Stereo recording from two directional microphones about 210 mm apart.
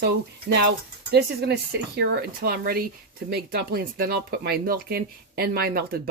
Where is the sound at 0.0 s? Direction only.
50° right (ahead or behind).